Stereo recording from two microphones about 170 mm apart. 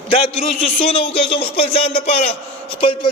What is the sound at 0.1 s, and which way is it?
A man's voice, 35° left (ahead or behind).